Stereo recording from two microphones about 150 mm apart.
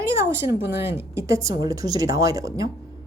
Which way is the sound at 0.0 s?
15° right (ahead or behind).